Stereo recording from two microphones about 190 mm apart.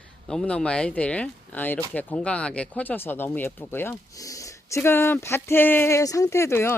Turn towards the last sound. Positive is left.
turn(degrees=15)  # may be behind; listen again after turning